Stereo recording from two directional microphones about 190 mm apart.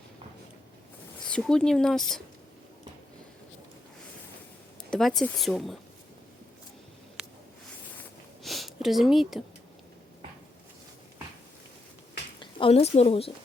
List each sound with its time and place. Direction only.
1.2 s speech: 5° left (ahead or behind)
4.9 s speech: centre (ahead or behind)
8.4 s a sound: centre (ahead or behind)
12.4 s a woman's voice: 30° left (ahead or behind)